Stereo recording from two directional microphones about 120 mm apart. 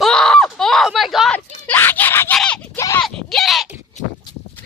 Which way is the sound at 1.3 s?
10° left (ahead or behind).